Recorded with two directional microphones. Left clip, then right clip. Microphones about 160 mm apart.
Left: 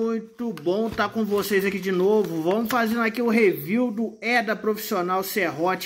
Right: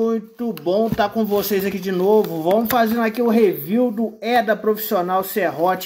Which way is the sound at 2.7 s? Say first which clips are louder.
Right 5 dB; 15° left (ahead or behind).